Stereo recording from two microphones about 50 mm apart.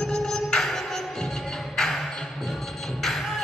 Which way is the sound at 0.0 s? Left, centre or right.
Centre.